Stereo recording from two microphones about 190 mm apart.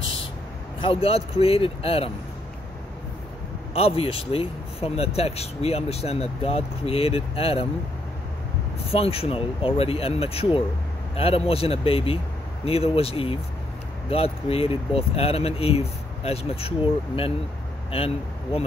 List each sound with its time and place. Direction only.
0.7 s speech: 30° left (ahead or behind)
3.7 s speech: 30° left (ahead or behind)
8.9 s speech: 30° left (ahead or behind)